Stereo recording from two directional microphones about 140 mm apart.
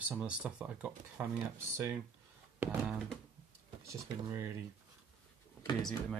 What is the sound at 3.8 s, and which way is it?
Speech, 20° right (ahead or behind).